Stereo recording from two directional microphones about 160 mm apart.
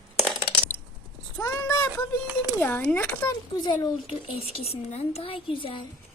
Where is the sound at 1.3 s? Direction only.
20° left (ahead or behind).